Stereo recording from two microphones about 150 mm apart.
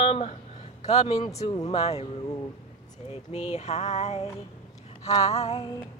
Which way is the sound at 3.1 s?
45° left (ahead or behind).